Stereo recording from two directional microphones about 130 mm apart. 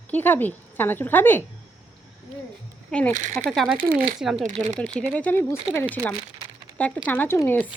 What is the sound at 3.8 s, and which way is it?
Speech, 90° right.